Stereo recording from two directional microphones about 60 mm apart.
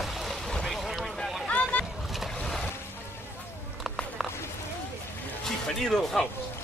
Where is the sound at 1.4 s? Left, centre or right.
Left.